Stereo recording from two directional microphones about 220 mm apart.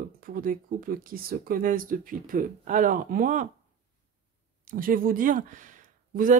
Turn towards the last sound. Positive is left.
turn(degrees=-35)  # may be behind; listen again after turning